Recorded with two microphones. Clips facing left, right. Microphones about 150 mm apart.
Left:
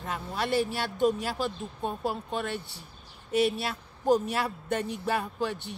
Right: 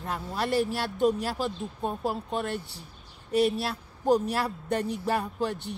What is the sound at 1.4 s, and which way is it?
Speech, centre (ahead or behind).